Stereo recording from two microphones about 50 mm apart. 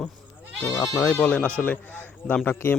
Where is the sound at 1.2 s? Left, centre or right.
Left.